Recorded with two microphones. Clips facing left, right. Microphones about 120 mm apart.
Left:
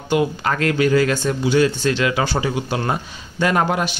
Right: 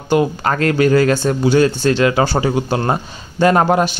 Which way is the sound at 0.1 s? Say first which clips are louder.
Right 4 dB; 40° right (ahead or behind).